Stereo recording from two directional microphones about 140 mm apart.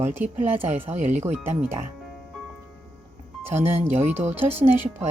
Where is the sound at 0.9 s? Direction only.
55° right (ahead or behind).